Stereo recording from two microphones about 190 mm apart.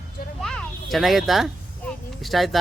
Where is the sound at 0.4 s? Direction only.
Centre (ahead or behind).